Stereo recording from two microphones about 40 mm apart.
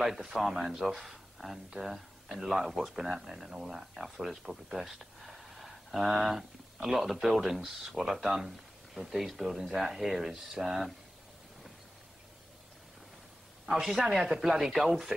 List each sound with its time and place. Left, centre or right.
0.0 s speech: centre
13.7 s speech: centre